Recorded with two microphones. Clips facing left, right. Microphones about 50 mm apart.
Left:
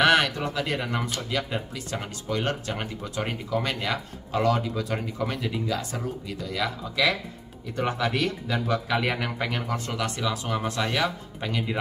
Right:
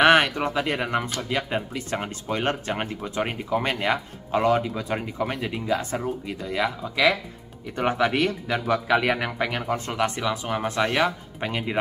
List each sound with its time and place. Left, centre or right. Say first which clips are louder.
0.0 s speech: right 3 dB; right; by 9.7 s centre
9.7 s speech: right 4 dB; right